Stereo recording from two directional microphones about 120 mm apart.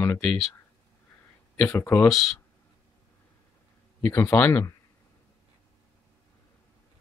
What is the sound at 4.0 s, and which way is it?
Speech, 20° left (ahead or behind).